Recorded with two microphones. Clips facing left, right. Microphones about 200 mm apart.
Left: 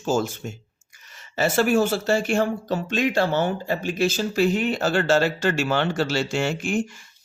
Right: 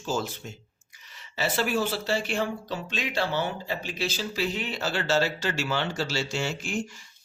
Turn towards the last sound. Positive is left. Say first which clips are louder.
# left 6 dB
turn(degrees=55)  # may be behind; listen again after turning